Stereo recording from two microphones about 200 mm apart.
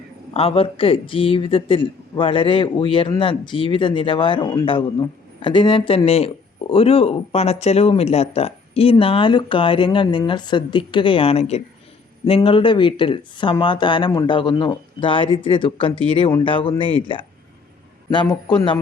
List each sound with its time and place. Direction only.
0.3 s speech: 30° left (ahead or behind)